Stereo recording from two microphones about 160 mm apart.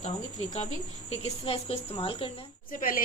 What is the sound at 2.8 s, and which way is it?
Speech, 60° left (ahead or behind).